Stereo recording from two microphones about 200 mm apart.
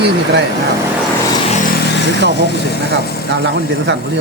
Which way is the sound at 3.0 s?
50° left (ahead or behind).